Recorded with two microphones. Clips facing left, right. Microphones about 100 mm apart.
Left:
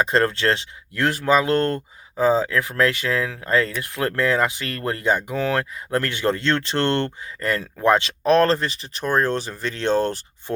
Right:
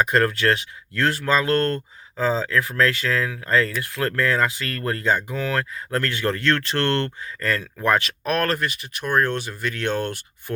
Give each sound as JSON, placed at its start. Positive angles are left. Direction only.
{"t": 0.0, "sound": "speech", "side_deg": 30}
{"t": 0.9, "sound": "speech", "side_deg": 20}